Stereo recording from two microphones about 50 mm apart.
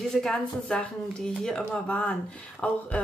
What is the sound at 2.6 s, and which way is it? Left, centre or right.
Speech, left.